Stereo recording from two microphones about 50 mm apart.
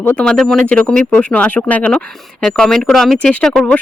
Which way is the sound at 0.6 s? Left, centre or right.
Left.